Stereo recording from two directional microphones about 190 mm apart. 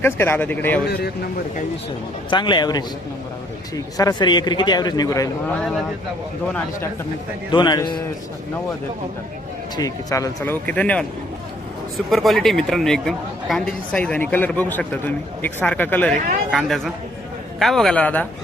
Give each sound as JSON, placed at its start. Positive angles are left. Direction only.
{"t": 0.0, "sound": "speech", "side_deg": 10}
{"t": 0.9, "sound": "speech", "side_deg": 55}
{"t": 2.3, "sound": "a man's voice", "side_deg": 25}
{"t": 3.9, "sound": "a man's voice", "side_deg": 20}
{"t": 7.5, "sound": "a man's voice", "side_deg": 20}
{"t": 9.7, "sound": "speech", "side_deg": 20}